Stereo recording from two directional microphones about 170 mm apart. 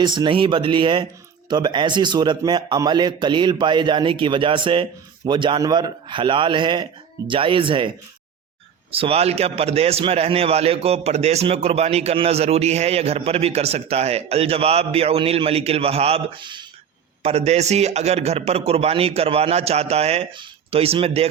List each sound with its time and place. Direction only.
0.0 s a man's voice: 25° right (ahead or behind)
17.2 s a man's voice: 40° right (ahead or behind)